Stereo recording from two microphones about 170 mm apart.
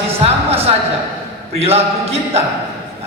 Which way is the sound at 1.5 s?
35° right (ahead or behind).